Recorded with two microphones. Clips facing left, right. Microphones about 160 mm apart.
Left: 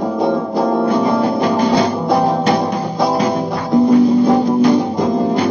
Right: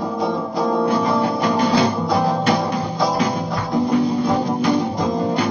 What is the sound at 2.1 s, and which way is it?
Music, 55° left (ahead or behind).